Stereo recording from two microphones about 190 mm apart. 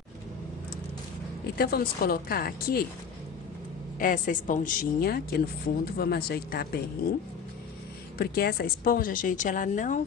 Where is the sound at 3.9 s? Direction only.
45° left (ahead or behind).